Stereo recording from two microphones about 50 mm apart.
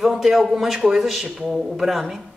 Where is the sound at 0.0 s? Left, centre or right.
Centre.